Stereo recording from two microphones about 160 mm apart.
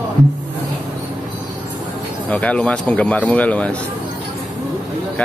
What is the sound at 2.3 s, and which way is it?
A man's voice, 5° left (ahead or behind).